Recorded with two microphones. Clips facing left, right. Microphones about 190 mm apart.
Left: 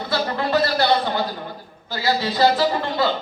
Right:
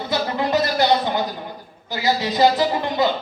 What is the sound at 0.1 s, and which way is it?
Music, 20° right (ahead or behind).